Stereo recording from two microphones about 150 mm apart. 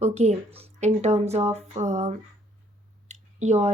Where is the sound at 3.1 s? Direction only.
50° right (ahead or behind).